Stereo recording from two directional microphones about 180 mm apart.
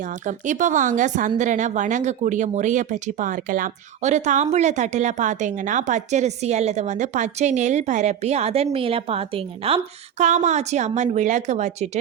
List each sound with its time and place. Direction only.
0.0 s a woman's voice: 45° right (ahead or behind)